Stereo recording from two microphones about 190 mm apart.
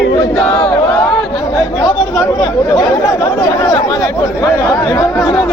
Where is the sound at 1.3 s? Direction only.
25° left (ahead or behind).